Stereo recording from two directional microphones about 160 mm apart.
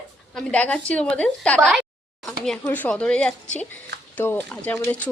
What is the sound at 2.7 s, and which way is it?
Speech, 10° left (ahead or behind).